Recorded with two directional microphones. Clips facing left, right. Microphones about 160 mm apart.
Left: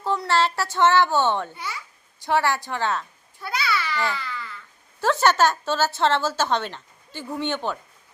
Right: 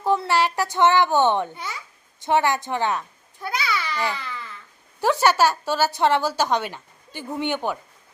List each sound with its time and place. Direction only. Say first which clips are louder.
0.0 s a child's voice: right 2 dB; 15° right (ahead or behind)
3.6 s babbling: left 1 dB; 15° right (ahead or behind)
4.9 s a woman's voice: right 1 dB; 15° right (ahead or behind)